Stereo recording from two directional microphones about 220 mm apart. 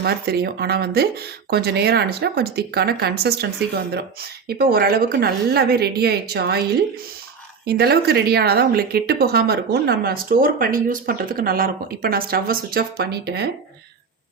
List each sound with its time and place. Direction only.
0.0 s a woman's voice: 45° right (ahead or behind)